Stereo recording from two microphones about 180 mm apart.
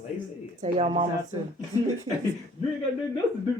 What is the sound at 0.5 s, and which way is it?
Speech, 40° right (ahead or behind).